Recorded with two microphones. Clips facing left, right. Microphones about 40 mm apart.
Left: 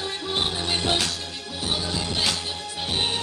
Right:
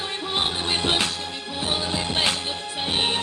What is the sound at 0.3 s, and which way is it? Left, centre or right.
Music, right.